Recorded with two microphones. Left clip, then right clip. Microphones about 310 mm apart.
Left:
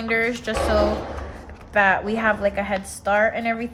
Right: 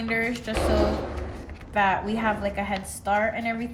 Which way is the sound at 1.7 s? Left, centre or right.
Centre.